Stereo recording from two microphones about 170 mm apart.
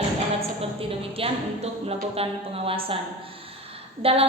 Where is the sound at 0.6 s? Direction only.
35° right (ahead or behind).